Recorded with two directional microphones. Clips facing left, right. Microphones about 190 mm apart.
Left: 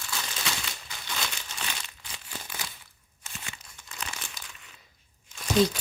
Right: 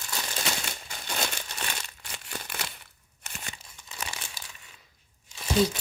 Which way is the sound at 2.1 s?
65° right (ahead or behind).